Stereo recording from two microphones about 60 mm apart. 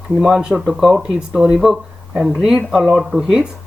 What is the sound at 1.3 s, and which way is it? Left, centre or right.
Speech, centre.